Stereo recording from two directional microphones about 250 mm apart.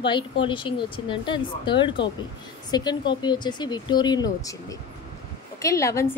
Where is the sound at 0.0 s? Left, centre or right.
Centre.